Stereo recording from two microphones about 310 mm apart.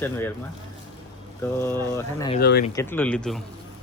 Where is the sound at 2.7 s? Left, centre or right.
Centre.